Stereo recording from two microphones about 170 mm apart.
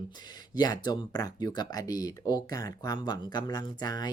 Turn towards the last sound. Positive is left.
turn(degrees=25)  # may be behind; listen again after turning